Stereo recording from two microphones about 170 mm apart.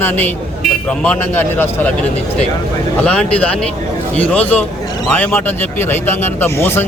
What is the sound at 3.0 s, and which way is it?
Speech, 5° left (ahead or behind).